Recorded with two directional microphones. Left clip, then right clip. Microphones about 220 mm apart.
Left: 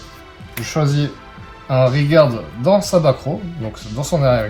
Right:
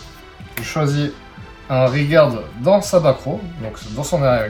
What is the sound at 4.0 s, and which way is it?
Speech, 20° left (ahead or behind).